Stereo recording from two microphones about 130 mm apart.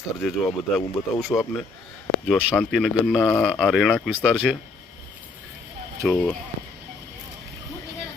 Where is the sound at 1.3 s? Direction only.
35° left (ahead or behind).